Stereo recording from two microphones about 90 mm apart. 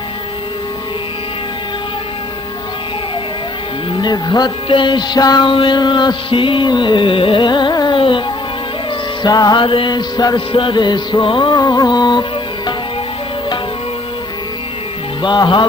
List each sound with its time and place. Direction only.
3.9 s music: 55° left (ahead or behind)
4.6 s music: 65° left (ahead or behind)
5.5 s music: 60° left (ahead or behind)
9.2 s music: 50° left (ahead or behind)
9.6 s music: 70° left (ahead or behind); by 10.4 s 50° left (ahead or behind)
10.5 s music: 65° left (ahead or behind)
15.2 s music: 60° left (ahead or behind)